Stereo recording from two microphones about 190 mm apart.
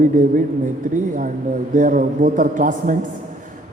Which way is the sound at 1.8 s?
45° right (ahead or behind).